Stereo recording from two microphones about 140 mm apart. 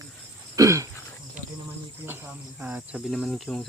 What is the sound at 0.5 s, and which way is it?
Throat clearing, 20° right (ahead or behind).